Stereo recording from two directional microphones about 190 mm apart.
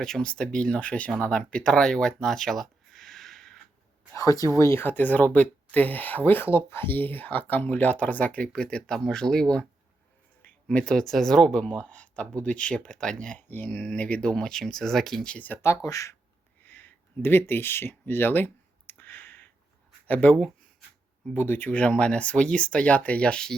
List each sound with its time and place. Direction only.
0.0 s speech: 5° left (ahead or behind)
4.1 s speech: 15° left (ahead or behind)
16.6 s a sound: 10° left (ahead or behind)
20.1 s speech: 5° left (ahead or behind)